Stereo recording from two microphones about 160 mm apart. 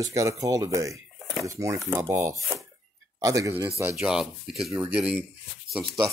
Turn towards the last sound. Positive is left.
turn(degrees=-5)  # may be behind; listen again after turning